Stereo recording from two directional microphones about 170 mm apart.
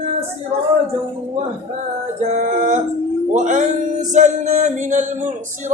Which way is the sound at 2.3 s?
45° right (ahead or behind).